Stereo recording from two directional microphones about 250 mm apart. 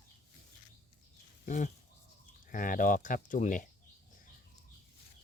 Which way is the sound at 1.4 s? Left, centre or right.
Left.